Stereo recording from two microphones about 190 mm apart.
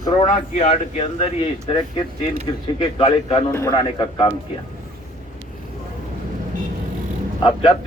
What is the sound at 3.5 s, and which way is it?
Speech, 20° left (ahead or behind).